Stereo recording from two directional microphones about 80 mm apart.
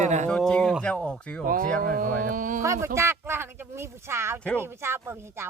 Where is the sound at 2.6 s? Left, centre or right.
Right.